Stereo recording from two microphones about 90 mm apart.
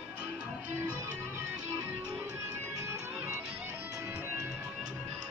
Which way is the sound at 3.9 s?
35° right (ahead or behind).